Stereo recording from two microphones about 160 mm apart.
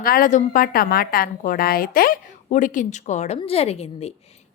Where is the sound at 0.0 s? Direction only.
60° left (ahead or behind); by 4.1 s 40° left (ahead or behind).